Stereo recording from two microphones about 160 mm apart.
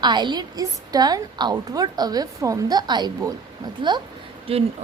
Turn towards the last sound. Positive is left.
turn(degrees=-35)  # may be behind; listen again after turning